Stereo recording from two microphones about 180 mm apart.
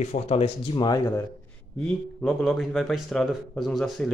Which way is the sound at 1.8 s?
Centre (ahead or behind).